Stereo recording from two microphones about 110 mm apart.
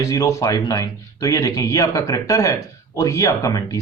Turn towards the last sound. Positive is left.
turn(degrees=30)  # may be behind; listen again after turning